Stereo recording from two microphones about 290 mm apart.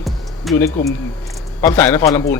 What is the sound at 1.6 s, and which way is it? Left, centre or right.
Speech, centre.